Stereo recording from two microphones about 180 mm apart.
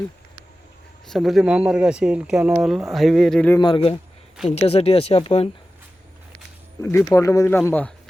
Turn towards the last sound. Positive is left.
turn(degrees=10)  # may be behind; listen again after turning